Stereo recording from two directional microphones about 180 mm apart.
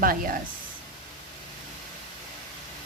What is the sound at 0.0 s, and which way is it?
Speech, 50° right (ahead or behind).